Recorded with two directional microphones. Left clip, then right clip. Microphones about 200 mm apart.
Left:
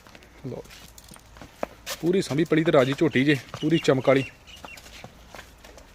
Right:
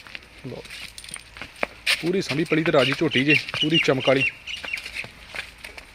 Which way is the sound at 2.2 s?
30° left (ahead or behind).